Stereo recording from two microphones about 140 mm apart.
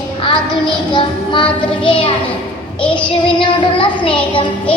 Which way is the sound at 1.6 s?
40° left (ahead or behind).